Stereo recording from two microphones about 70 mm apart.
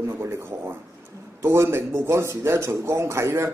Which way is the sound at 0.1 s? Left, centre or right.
Right.